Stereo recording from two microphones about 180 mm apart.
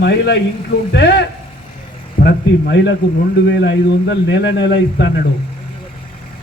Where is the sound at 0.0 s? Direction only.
70° left (ahead or behind).